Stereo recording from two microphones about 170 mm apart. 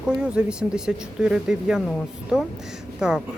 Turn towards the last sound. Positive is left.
turn(degrees=-5)  # may be behind; listen again after turning